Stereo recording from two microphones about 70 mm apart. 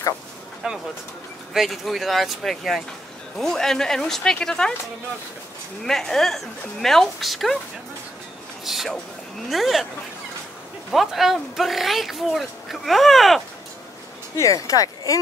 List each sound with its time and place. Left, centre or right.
0.6 s speech: centre
5.9 s speech: centre
8.6 s speech: centre
10.9 s speech: centre
14.3 s speech: left